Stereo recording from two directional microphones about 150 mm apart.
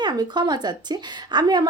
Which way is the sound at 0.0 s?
30° right (ahead or behind).